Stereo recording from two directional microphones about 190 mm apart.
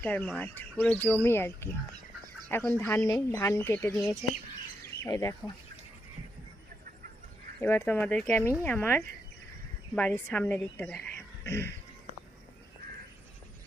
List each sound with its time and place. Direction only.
0.0 s speech: 5° left (ahead or behind)
7.6 s speech: 10° left (ahead or behind)